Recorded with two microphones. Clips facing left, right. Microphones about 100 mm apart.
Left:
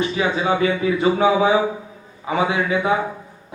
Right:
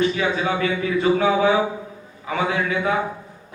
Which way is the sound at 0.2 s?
25° left (ahead or behind).